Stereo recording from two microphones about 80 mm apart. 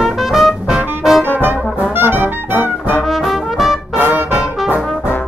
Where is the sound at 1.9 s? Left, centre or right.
Right.